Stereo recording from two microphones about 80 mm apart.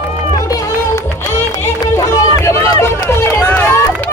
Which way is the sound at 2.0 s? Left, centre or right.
Left.